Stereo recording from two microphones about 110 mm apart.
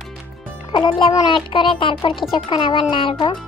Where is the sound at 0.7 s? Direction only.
45° left (ahead or behind).